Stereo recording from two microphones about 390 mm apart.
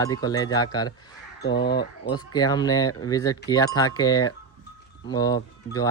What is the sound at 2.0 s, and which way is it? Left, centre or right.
Speech, centre.